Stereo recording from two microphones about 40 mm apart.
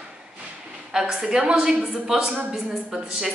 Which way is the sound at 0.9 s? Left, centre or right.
Centre.